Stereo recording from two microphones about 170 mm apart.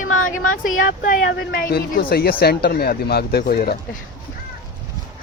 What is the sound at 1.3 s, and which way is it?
Speech, 70° left (ahead or behind).